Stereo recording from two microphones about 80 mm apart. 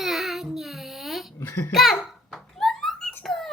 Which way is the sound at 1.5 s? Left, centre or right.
Left.